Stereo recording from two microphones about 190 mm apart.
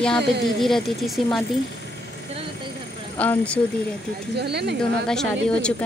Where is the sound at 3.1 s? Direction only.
5° left (ahead or behind).